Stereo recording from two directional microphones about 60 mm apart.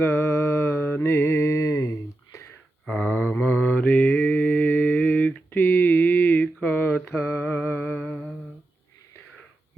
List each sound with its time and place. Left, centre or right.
0.2 s mantra: left
2.8 s a sound: centre
3.2 s mantra: left
7.2 s mantra: left
7.4 s a sound: left
7.9 s humming: centre